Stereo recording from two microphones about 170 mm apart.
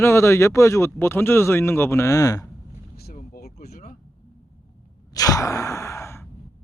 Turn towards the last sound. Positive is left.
turn(degrees=15)  # may be behind; listen again after turning